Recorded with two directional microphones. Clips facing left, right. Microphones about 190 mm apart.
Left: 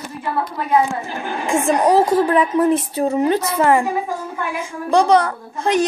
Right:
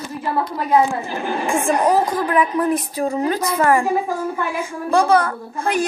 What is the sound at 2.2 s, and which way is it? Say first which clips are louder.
A child's voice: left 3 dB; 30° left (ahead or behind).